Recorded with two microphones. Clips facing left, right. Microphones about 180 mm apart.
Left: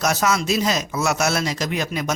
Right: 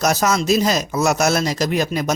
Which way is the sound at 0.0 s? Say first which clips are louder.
Right 3 dB; 40° right (ahead or behind).